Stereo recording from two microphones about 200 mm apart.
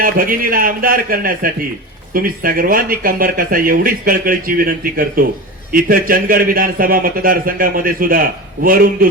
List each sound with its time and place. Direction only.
0.0 s speech: 45° right (ahead or behind)